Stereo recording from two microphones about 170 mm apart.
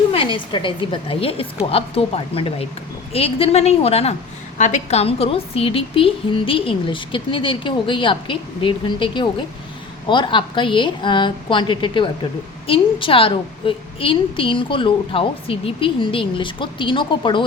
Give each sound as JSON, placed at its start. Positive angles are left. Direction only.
{"t": 0.1, "sound": "a woman's voice", "side_deg": 30}